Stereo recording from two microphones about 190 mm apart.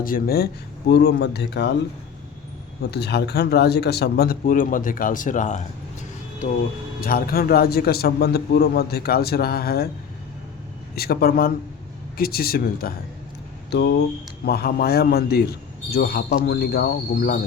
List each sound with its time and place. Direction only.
0.0 s speech: 50° left (ahead or behind)
0.9 s a man's voice: 60° left (ahead or behind)
2.9 s a man's voice: 60° left (ahead or behind); by 5.6 s 40° left (ahead or behind)
7.0 s a man's voice: 50° left (ahead or behind)
10.9 s speech: 55° left (ahead or behind)
13.7 s a man's voice: 65° left (ahead or behind)